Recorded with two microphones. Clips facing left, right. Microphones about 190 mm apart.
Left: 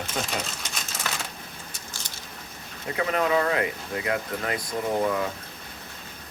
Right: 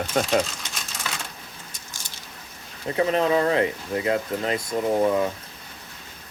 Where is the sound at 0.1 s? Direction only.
50° right (ahead or behind).